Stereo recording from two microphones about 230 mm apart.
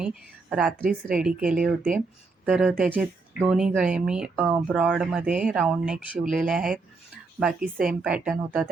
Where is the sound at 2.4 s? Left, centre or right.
Centre.